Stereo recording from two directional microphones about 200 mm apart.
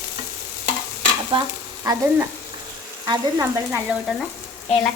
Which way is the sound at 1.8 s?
15° right (ahead or behind).